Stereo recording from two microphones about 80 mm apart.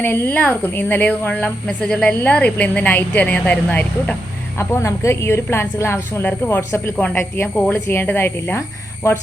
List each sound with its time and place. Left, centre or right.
0.0 s a woman's voice: left
4.5 s a woman's voice: left
7.4 s a woman's voice: centre; by 9.2 s left